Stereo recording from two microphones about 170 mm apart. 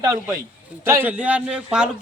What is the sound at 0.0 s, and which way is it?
A man's voice, 20° right (ahead or behind).